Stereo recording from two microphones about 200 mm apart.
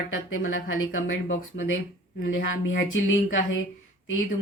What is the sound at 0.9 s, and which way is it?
Speech, 75° left (ahead or behind).